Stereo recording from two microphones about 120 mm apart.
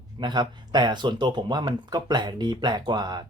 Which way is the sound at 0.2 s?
40° right (ahead or behind).